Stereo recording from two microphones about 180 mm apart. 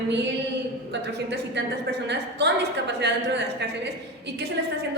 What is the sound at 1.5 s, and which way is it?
A woman's voice, 70° right (ahead or behind).